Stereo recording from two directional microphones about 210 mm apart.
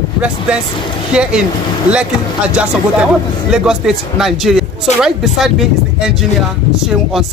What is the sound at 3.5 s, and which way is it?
Speech, centre (ahead or behind).